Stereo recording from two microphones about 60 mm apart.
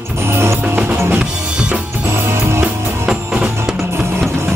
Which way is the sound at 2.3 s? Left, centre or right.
Right.